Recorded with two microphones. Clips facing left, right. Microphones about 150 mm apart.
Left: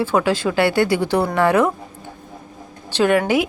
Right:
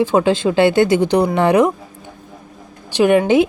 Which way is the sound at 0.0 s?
20° right (ahead or behind).